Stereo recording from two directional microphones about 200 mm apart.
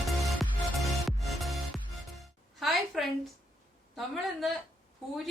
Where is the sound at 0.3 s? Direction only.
Centre (ahead or behind).